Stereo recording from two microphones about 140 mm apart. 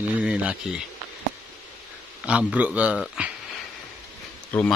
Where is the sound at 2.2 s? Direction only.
10° right (ahead or behind).